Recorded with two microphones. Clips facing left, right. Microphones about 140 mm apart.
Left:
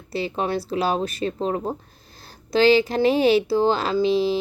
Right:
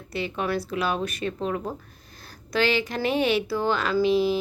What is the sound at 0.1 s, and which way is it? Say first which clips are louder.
A woman's voice: left 3 dB; 30° left (ahead or behind).